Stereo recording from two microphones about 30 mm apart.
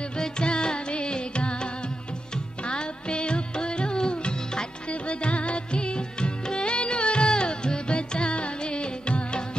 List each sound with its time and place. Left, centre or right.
0.2 s music: left